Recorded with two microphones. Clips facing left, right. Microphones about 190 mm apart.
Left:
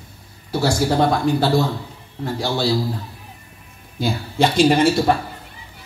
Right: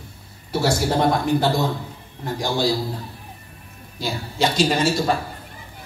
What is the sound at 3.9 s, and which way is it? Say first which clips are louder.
Speech: left 4 dB; 55° left (ahead or behind).